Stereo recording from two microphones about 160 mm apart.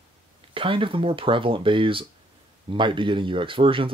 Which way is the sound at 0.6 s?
35° right (ahead or behind).